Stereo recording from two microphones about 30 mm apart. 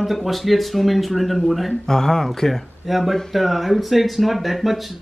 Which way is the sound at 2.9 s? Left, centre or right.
Centre.